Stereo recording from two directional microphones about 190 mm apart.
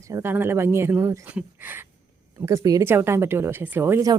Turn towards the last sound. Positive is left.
turn(degrees=-15)  # may be behind; listen again after turning